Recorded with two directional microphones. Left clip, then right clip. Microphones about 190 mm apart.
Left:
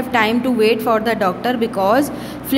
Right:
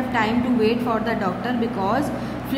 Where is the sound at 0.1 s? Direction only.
45° left (ahead or behind).